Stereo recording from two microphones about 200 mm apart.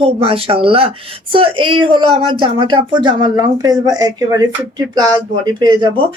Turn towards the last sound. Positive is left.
turn(degrees=-20)  # may be behind; listen again after turning